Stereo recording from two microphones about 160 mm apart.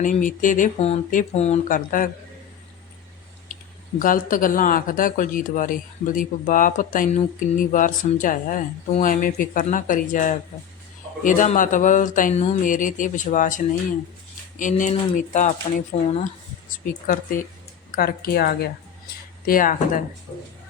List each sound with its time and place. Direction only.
0.0 s speech: 55° left (ahead or behind)
3.5 s speech: 55° left (ahead or behind)
14.6 s speech: 50° left (ahead or behind); by 18.5 s 70° left (ahead or behind)
19.5 s speech: 60° left (ahead or behind)